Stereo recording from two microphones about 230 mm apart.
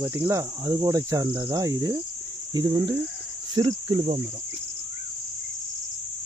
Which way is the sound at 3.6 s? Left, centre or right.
Centre.